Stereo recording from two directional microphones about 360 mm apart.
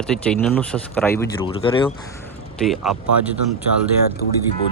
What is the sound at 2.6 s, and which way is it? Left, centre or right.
Speech, centre.